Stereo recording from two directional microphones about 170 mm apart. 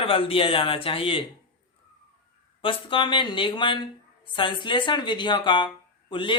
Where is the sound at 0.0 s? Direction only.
30° left (ahead or behind).